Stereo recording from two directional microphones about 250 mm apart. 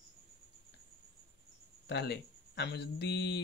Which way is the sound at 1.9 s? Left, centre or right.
Left.